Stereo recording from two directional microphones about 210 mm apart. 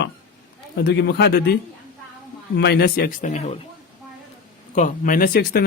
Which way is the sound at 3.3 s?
30° left (ahead or behind).